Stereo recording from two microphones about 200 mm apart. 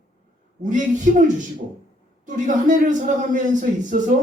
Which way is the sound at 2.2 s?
40° right (ahead or behind).